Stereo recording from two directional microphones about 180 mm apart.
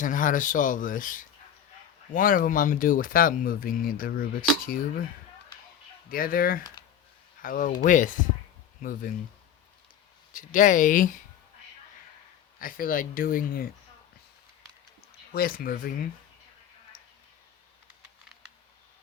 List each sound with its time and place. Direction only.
0.0 s speech: 45° left (ahead or behind)
6.1 s speech: 50° left (ahead or behind)
10.3 s speech: 45° left (ahead or behind)
12.5 s speech: 50° left (ahead or behind)
15.3 s speech: 55° left (ahead or behind)